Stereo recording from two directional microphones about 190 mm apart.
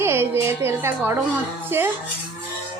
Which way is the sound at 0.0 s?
15° right (ahead or behind).